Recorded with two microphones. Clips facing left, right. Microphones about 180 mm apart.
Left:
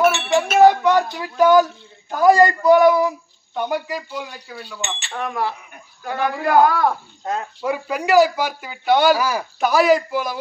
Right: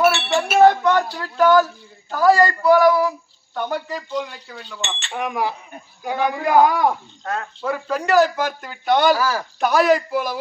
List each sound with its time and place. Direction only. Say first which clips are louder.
0.1 s a sound: left 1 dB; 15° left (ahead or behind)
1.0 s a man's voice: left 1 dB; 15° left (ahead or behind)
5.1 s a man's voice: right 1 dB; 15° right (ahead or behind)
7.2 s a man's voice: left 1 dB; 15° left (ahead or behind)
9.2 s a man's voice: even; 15° left (ahead or behind)
9.6 s a man's voice: left 1 dB; centre (ahead or behind)